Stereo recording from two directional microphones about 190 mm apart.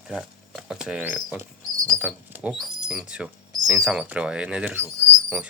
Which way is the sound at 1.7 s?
15° right (ahead or behind).